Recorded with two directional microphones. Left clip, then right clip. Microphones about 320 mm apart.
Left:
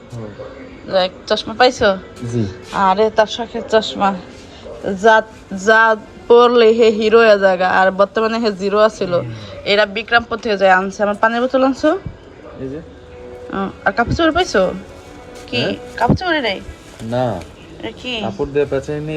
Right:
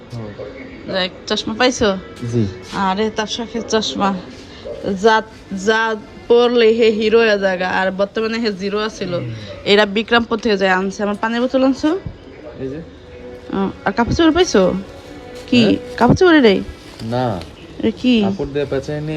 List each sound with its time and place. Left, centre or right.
0.9 s a woman's voice: centre
13.5 s a woman's voice: centre
17.8 s speech: right
18.6 s speech: centre